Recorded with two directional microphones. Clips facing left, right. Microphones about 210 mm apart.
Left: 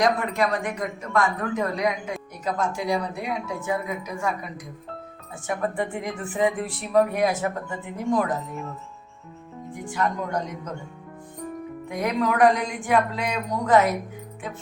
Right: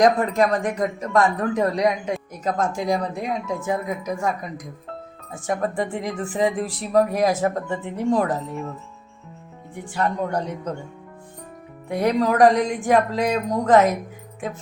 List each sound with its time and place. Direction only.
0.0 s speech: 45° right (ahead or behind)
9.9 s speech: 35° right (ahead or behind)
11.9 s speech: 35° right (ahead or behind)